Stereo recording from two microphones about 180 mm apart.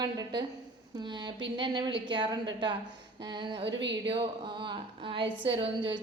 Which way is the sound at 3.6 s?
80° right.